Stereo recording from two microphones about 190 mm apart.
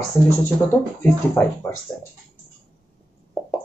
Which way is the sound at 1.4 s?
10° left (ahead or behind).